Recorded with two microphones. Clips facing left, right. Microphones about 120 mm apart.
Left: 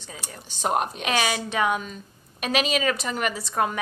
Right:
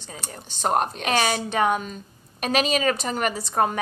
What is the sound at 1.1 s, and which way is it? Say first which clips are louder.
A woman's voice: right 2 dB; 45° right (ahead or behind).